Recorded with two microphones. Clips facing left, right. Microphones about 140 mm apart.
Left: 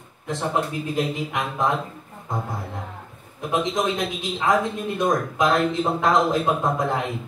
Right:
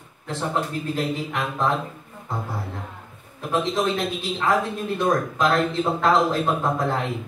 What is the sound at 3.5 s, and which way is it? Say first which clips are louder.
Speech: even; 15° left (ahead or behind).